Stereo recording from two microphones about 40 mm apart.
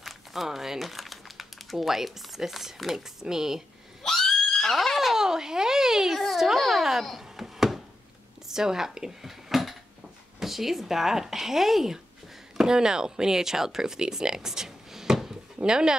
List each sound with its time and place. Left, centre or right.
0.0 s speech: centre
4.0 s neigh: centre
4.5 s screaming: centre
5.1 s a sound: centre
6.3 s a sound: centre
8.5 s speech: centre